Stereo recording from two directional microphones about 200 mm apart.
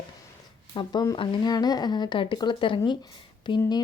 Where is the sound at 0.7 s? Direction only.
25° left (ahead or behind).